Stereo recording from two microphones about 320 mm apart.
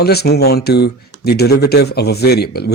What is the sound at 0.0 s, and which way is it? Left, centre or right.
Speech, left.